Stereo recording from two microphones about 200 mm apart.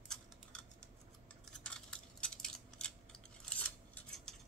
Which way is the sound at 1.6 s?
5° left (ahead or behind).